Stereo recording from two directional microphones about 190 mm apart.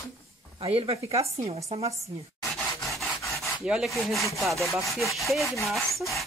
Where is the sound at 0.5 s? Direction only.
30° right (ahead or behind).